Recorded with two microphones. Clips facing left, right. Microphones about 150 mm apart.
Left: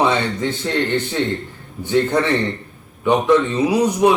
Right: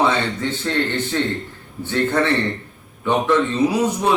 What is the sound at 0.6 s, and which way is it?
Speech, 15° left (ahead or behind).